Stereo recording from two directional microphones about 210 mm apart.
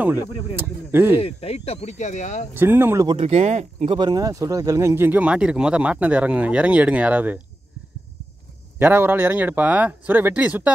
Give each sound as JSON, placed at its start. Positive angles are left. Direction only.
{"t": 0.6, "sound": "speech", "side_deg": -10}
{"t": 1.2, "sound": "speech", "side_deg": 30}
{"t": 2.5, "sound": "speech", "side_deg": -10}
{"t": 3.1, "sound": "speech", "side_deg": -30}
{"t": 8.7, "sound": "speech", "side_deg": -10}